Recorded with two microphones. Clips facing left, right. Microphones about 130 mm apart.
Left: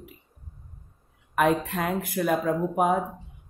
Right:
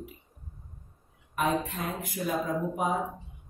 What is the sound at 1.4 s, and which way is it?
Speech, 60° left (ahead or behind).